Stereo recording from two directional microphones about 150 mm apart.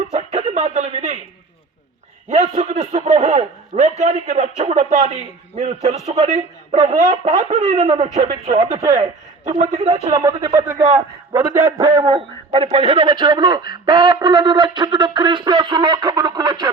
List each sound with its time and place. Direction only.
0.1 s a sound: 45° right (ahead or behind)
2.3 s a man's voice: 45° right (ahead or behind)
6.2 s a man's voice: 50° right (ahead or behind)
8.7 s a man's voice: 20° right (ahead or behind)
9.0 s a man's voice: 50° right (ahead or behind)
9.8 s a man's voice: 25° right (ahead or behind)
10.8 s a man's voice: 45° right (ahead or behind)
11.3 s a man's voice: 15° right (ahead or behind)